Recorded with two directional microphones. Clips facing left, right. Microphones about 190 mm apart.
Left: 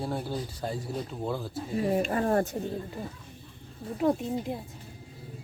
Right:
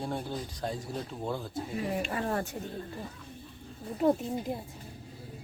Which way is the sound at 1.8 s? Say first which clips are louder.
Left 7 dB; 35° left (ahead or behind).